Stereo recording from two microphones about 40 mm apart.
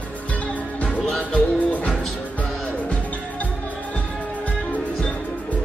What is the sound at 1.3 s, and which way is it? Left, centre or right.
Music, left.